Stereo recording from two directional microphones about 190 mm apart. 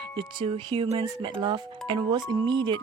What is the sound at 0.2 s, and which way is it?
A woman's voice, 25° right (ahead or behind).